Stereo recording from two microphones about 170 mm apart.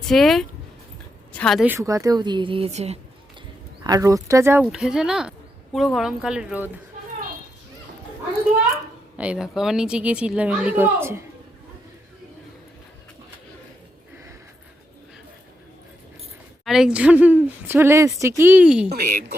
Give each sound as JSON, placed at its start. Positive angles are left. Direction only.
{"t": 0.1, "sound": "a woman's voice", "side_deg": 0}
{"t": 1.6, "sound": "speech", "side_deg": -15}
{"t": 3.8, "sound": "a woman's voice", "side_deg": -20}
{"t": 9.1, "sound": "speech", "side_deg": -5}
{"t": 16.6, "sound": "speech", "side_deg": -5}
{"t": 18.9, "sound": "speech", "side_deg": -65}